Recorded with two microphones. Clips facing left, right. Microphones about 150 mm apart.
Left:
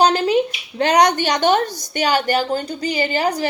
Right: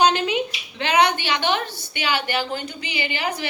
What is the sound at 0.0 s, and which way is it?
A woman's voice, 35° left (ahead or behind).